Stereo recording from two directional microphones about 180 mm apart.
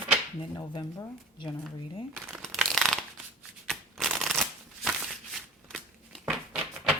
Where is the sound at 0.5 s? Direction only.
25° left (ahead or behind).